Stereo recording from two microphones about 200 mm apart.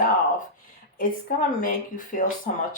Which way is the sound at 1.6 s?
40° left (ahead or behind).